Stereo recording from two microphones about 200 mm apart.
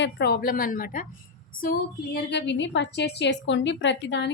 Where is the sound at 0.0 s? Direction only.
50° left (ahead or behind).